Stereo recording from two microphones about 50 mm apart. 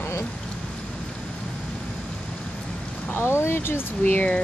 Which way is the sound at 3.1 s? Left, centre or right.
Left.